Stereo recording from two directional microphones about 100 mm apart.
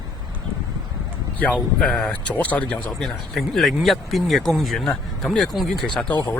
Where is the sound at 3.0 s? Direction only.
Centre (ahead or behind).